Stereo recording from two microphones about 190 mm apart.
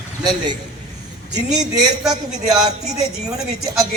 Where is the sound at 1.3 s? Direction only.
20° right (ahead or behind).